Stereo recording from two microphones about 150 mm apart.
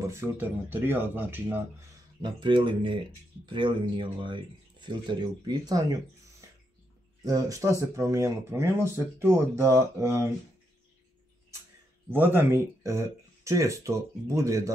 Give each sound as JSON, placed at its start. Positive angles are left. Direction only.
{"t": 0.1, "sound": "speech", "side_deg": -15}
{"t": 2.2, "sound": "speech", "side_deg": -30}
{"t": 7.2, "sound": "speech", "side_deg": -25}
{"t": 12.1, "sound": "speech", "side_deg": -15}